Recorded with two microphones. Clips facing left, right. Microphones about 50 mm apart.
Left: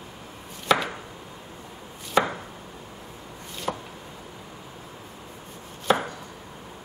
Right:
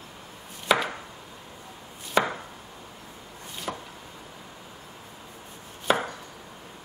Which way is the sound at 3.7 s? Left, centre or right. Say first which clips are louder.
Left 4 dB; centre.